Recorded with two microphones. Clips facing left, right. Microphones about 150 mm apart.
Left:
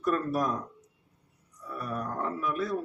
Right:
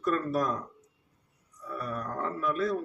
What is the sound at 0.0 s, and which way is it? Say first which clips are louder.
Speech: even; 5° left (ahead or behind).